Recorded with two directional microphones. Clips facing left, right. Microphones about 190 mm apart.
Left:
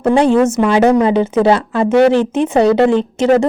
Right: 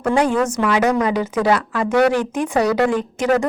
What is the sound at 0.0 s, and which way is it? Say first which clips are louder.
A woman's voice: left 6 dB; 25° left (ahead or behind).